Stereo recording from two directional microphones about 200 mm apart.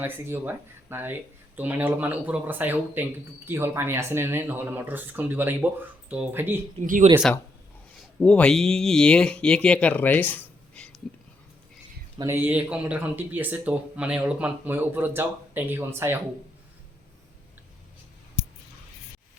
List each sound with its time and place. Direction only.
0.0 s speech: 10° right (ahead or behind)
6.8 s speech: 40° right (ahead or behind)
8.2 s speech: 5° left (ahead or behind)
12.1 s speech: 15° right (ahead or behind)